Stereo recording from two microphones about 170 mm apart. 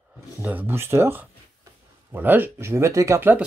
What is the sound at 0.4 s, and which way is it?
Speech, 10° right (ahead or behind).